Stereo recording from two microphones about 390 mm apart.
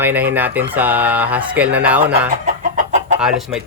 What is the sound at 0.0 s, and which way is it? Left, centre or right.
Speech, centre.